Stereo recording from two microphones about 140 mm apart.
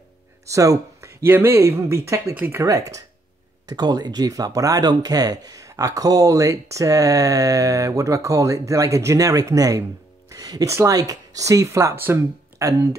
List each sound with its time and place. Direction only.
0.5 s speech: 25° right (ahead or behind)